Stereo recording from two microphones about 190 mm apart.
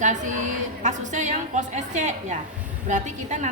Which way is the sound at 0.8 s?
40° right (ahead or behind).